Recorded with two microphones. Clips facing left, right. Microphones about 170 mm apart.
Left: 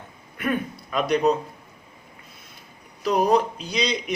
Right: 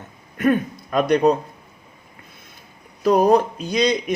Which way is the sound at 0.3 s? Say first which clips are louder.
Right 7 dB; 45° right (ahead or behind).